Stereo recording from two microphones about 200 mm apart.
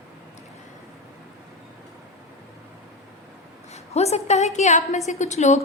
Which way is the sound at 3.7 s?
35° left (ahead or behind).